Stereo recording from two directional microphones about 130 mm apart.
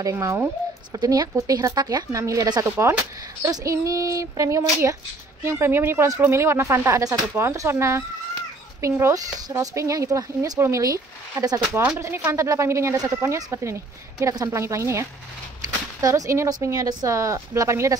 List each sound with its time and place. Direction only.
0.0 s speech: 25° right (ahead or behind)